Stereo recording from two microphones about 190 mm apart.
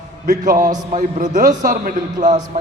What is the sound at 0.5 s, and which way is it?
Speech, 20° right (ahead or behind).